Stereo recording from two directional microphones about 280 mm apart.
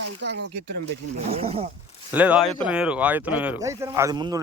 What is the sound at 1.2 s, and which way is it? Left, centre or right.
Speech, right.